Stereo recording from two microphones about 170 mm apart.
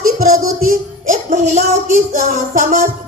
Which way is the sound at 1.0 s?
45° right (ahead or behind).